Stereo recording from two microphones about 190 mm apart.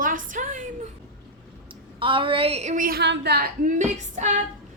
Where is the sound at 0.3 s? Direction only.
40° right (ahead or behind).